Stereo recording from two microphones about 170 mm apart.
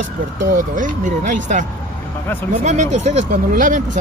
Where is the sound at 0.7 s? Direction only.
50° right (ahead or behind).